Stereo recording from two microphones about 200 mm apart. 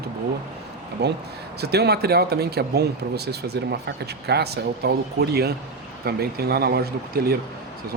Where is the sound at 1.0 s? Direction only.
55° right (ahead or behind).